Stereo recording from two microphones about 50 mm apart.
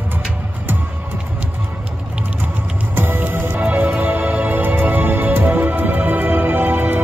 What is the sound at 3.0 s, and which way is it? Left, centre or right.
Music, right.